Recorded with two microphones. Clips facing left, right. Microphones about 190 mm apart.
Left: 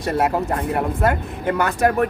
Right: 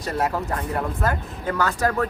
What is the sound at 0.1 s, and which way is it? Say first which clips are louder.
Speech: left 5 dB; 25° left (ahead or behind).